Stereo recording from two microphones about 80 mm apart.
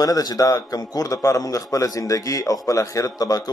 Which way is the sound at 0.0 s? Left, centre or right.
Left.